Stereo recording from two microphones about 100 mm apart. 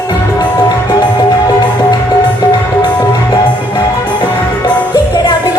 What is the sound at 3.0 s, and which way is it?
Music, 45° left (ahead or behind).